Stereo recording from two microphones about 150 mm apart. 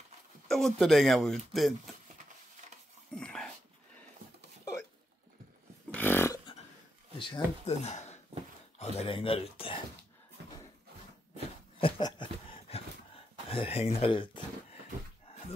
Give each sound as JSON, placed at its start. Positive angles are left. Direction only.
{"t": 0.5, "sound": "speech", "side_deg": 0}
{"t": 3.2, "sound": "dog", "side_deg": 5}
{"t": 5.9, "sound": "dog", "side_deg": 10}
{"t": 7.2, "sound": "speech", "side_deg": 30}
{"t": 7.6, "sound": "speech", "side_deg": 45}
{"t": 11.8, "sound": "a sound", "side_deg": 35}